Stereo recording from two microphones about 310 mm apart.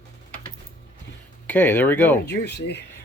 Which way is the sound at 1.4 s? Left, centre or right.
Centre.